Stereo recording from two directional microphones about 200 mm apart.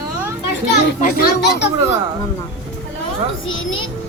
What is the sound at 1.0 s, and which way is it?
Speech, 55° left (ahead or behind).